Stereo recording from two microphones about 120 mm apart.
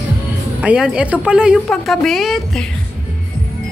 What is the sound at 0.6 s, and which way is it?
A woman's voice, 5° right (ahead or behind).